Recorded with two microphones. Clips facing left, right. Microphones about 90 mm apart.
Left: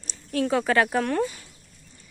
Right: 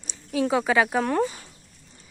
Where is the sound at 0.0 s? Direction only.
5° right (ahead or behind).